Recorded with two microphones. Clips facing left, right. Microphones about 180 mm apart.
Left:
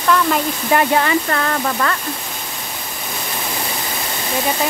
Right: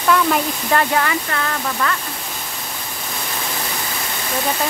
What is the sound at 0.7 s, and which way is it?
Speech, 25° left (ahead or behind).